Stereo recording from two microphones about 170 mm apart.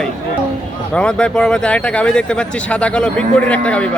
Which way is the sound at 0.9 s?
5° left (ahead or behind).